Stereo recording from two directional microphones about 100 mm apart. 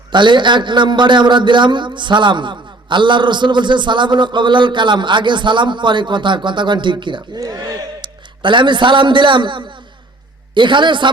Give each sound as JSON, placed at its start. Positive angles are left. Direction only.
{"t": 0.1, "sound": "a man's voice", "side_deg": -50}
{"t": 7.3, "sound": "a man's voice", "side_deg": -40}